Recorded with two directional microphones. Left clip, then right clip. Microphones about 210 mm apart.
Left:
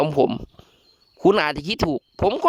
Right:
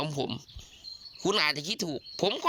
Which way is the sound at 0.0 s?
55° left (ahead or behind).